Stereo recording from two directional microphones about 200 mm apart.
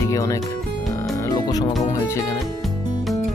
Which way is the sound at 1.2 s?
20° left (ahead or behind).